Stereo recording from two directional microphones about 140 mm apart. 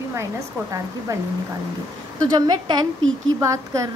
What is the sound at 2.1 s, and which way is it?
A woman's voice, 30° right (ahead or behind).